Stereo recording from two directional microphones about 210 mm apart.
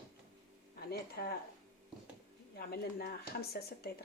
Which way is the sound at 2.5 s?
45° left (ahead or behind).